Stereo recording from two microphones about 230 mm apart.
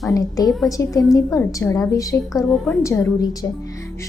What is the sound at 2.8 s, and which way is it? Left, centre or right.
Speech, centre.